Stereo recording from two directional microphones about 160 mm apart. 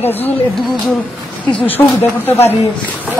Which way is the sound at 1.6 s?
10° left (ahead or behind).